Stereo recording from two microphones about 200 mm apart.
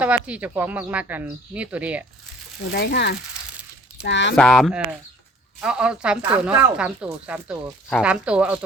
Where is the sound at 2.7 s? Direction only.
55° left (ahead or behind).